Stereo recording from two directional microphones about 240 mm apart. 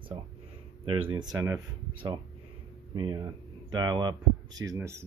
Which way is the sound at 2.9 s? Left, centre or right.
Centre.